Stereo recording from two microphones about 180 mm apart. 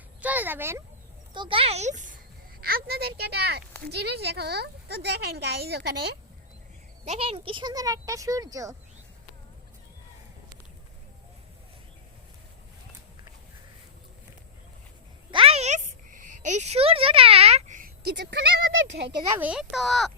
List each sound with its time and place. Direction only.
0.2 s speech: 10° right (ahead or behind)
1.3 s a child's voice: 25° right (ahead or behind); by 2.1 s 45° right (ahead or behind)
2.6 s speech: 55° right (ahead or behind)
7.0 s speech: 35° right (ahead or behind); by 8.7 s 20° right (ahead or behind)
15.3 s a sound: 30° right (ahead or behind); by 19.0 s 85° right
19.4 s speech: 5° right (ahead or behind)